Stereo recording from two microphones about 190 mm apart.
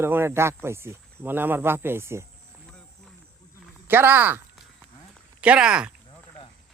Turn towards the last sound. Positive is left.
turn(degrees=-5)  # may be behind; listen again after turning